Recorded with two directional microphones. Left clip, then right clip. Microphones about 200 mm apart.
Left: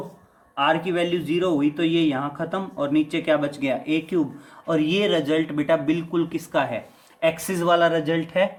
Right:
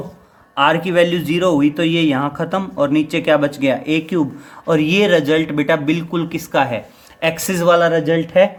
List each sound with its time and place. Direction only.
0.5 s speech: 45° right (ahead or behind); by 8.4 s 20° right (ahead or behind)